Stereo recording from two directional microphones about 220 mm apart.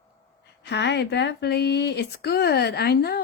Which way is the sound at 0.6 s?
50° left (ahead or behind).